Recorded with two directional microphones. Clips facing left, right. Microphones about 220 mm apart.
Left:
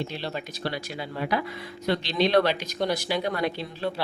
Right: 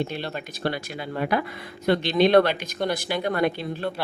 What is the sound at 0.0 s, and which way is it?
Speech, 55° right (ahead or behind).